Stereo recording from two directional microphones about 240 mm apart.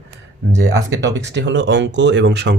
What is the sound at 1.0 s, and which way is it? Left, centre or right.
Speech, right.